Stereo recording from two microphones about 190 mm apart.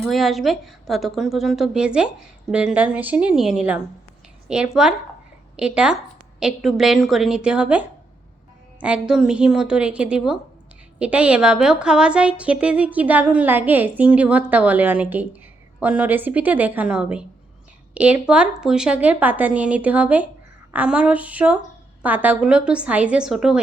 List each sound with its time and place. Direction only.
0.0 s a woman's voice: centre (ahead or behind)